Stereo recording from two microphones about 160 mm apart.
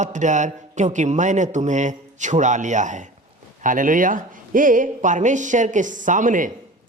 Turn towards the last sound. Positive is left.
turn(degrees=-55)  # may be behind; listen again after turning